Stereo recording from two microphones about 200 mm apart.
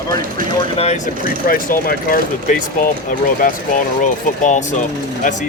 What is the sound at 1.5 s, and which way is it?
Speech, 45° left (ahead or behind).